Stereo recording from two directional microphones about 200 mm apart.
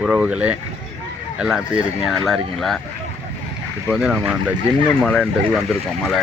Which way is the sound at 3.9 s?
5° right (ahead or behind).